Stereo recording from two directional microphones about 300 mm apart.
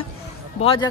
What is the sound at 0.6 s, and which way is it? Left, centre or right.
Speech, centre.